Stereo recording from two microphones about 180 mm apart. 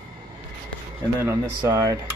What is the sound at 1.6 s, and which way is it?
Speech, 15° right (ahead or behind).